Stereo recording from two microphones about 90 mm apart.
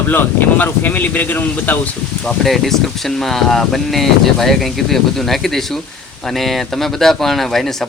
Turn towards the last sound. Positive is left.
turn(degrees=5)  # may be behind; listen again after turning